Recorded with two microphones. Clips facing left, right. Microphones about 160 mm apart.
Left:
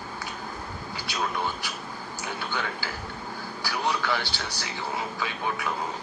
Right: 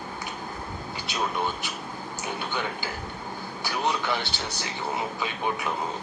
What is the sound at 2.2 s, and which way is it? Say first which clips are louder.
Speech: right 1 dB; 20° right (ahead or behind).